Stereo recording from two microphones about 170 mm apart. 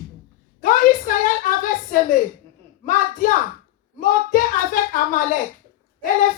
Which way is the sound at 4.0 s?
50° left (ahead or behind).